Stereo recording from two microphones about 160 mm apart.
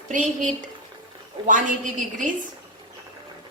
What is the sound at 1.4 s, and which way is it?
Speech, 55° right (ahead or behind).